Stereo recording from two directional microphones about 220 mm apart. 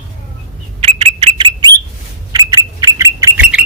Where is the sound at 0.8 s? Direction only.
25° right (ahead or behind).